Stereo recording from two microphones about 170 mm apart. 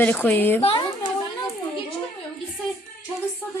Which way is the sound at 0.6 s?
35° left (ahead or behind).